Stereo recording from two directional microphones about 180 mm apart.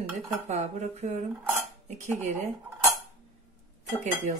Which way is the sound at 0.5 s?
40° right (ahead or behind).